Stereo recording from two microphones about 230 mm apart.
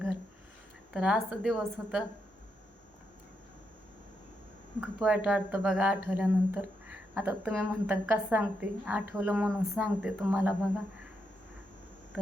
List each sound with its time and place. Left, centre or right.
0.9 s speech: centre
4.8 s a woman's voice: centre